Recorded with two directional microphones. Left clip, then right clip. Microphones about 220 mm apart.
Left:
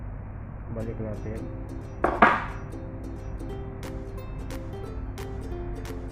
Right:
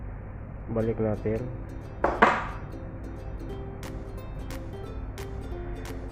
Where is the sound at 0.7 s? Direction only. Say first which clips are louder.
Right 8 dB; 50° right (ahead or behind).